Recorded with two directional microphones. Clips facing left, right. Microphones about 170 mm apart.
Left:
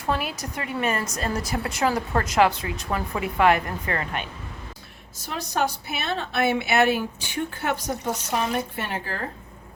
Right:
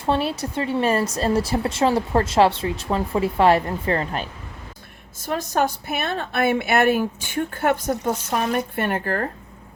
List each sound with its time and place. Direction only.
0.0 s a woman's voice: 30° right (ahead or behind)
5.2 s a woman's voice: 50° right (ahead or behind)